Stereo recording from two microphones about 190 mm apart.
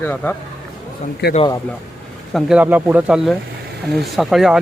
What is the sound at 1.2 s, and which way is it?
Speech, 60° left (ahead or behind).